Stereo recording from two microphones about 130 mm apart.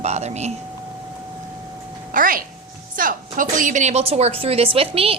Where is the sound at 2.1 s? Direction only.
90° right.